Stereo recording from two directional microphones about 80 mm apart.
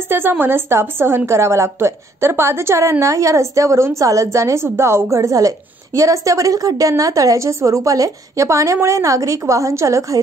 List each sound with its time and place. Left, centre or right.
0.1 s a woman's voice: right